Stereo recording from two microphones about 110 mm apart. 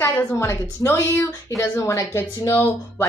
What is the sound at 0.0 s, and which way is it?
A woman's voice, 25° left (ahead or behind).